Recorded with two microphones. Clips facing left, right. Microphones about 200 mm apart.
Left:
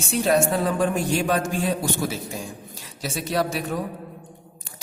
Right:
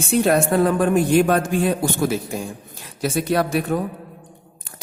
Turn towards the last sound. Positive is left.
turn(degrees=-55)  # may be behind; listen again after turning